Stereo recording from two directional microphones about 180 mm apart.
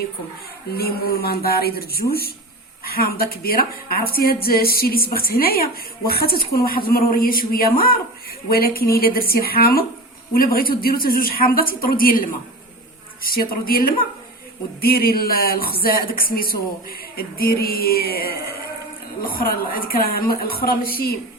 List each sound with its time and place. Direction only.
0.8 s a woman's voice: 60° left (ahead or behind)